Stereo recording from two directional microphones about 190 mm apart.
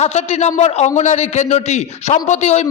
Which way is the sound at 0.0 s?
35° left (ahead or behind).